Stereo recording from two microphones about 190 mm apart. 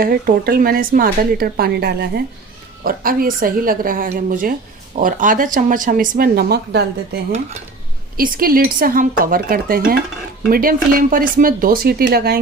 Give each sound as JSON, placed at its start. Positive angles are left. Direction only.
{"t": 0.0, "sound": "speech", "side_deg": -50}